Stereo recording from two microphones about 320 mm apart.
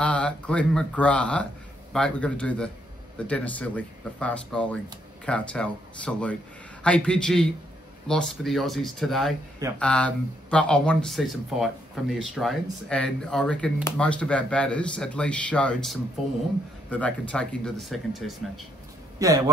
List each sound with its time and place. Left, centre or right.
0.0 s speech: centre
19.1 s speech: centre